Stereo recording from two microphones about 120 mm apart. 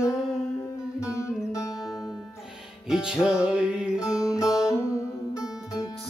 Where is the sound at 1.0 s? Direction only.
25° left (ahead or behind).